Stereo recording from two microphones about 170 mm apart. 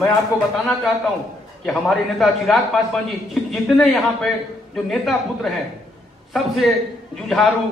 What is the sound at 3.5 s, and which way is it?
A man's voice, centre (ahead or behind).